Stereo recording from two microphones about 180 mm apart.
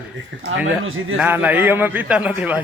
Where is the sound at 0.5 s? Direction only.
90° right.